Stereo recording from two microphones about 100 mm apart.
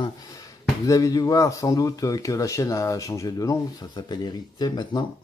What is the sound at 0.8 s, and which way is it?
Speech, 35° left (ahead or behind).